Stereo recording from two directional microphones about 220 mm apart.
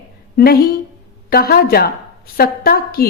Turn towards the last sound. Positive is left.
turn(degrees=45)  # may be behind; listen again after turning